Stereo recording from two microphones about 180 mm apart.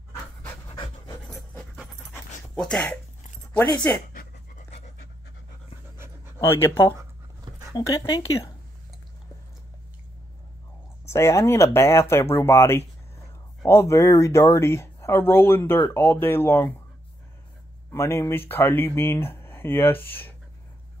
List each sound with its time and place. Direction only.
0.7 s pant: 30° left (ahead or behind)
2.5 s speech: 5° left (ahead or behind)
4.1 s pant: 50° left (ahead or behind)
4.6 s pant: 35° left (ahead or behind)
6.4 s speech: 15° left (ahead or behind)
11.1 s speech: 15° left (ahead or behind)
17.9 s speech: 15° left (ahead or behind)